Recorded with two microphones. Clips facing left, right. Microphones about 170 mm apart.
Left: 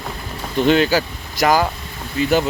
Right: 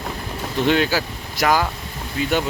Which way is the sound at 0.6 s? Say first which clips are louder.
Left 4 dB; centre (ahead or behind).